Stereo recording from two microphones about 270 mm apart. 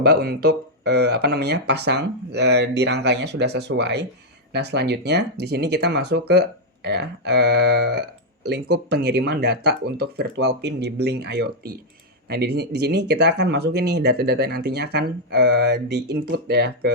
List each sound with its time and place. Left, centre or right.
0.0 s speech: right